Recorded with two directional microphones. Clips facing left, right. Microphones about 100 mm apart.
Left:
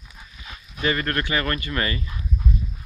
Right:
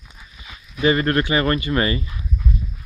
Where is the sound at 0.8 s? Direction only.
20° right (ahead or behind).